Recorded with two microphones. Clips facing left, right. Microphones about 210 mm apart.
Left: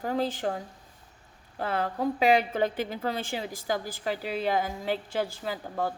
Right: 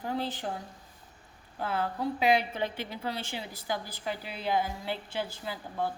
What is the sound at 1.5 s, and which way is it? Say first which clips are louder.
A woman's voice: left 3 dB; 45° left (ahead or behind).